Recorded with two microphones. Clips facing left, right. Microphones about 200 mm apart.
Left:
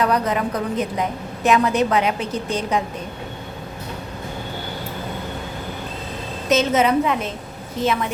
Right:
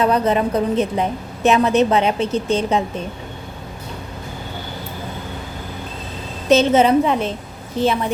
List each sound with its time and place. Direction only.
0.0 s a woman's voice: 25° right (ahead or behind)
6.5 s a woman's voice: 30° right (ahead or behind)